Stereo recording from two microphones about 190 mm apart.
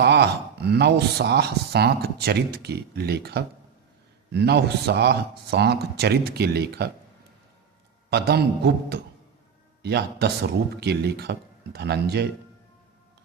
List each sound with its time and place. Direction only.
0.0 s speech: 60° right (ahead or behind)
8.1 s speech: 60° right (ahead or behind)